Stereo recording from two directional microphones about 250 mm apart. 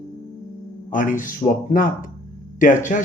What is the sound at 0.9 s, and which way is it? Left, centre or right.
Speech, left.